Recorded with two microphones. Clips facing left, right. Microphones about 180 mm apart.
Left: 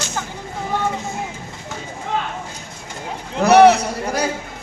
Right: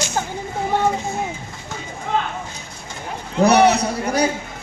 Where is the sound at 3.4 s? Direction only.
15° right (ahead or behind).